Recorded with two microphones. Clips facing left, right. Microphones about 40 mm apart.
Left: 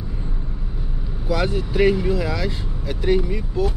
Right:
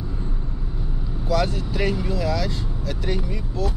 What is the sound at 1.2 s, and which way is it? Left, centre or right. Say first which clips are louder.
Speech: left 1 dB; centre.